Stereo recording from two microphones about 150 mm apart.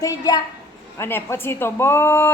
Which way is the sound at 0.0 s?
25° left (ahead or behind).